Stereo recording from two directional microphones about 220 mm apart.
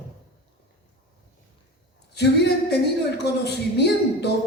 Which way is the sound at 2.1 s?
50° left (ahead or behind).